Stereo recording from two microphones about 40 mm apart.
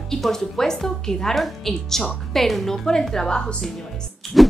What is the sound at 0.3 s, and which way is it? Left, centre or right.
A woman's voice, centre.